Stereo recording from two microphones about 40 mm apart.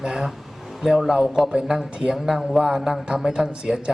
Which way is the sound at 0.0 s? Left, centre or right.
Centre.